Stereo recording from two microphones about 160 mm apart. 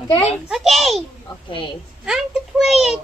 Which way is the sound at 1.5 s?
35° left (ahead or behind).